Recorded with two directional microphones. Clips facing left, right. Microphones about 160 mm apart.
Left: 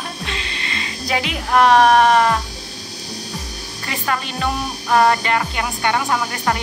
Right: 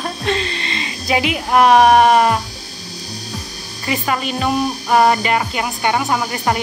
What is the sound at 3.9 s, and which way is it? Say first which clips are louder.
Speech: right 4 dB; 10° right (ahead or behind).